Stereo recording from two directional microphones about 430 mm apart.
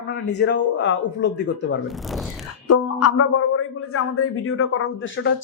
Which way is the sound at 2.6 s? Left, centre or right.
Left.